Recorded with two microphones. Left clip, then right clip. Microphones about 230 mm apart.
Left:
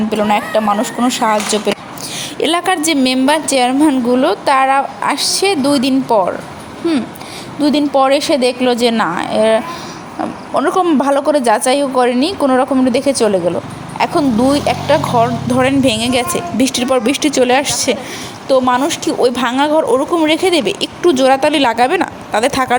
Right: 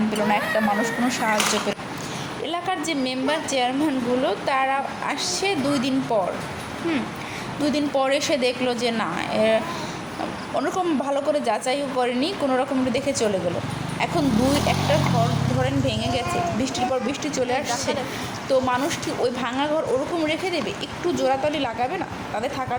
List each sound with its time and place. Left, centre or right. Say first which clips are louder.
0.3 s speech: left 7 dB; left
7.6 s speech: left 10 dB; left
14.3 s speech: left 8 dB; centre
15.5 s speech: left 14 dB; left